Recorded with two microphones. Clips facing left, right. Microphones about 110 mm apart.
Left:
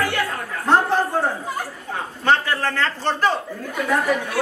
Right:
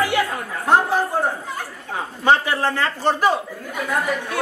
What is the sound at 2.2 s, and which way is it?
Speech, 15° right (ahead or behind).